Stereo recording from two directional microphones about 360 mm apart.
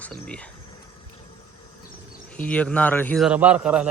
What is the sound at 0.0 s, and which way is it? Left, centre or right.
Speech, centre.